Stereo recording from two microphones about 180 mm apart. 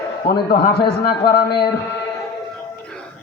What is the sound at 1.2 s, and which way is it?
Speech, 60° left (ahead or behind).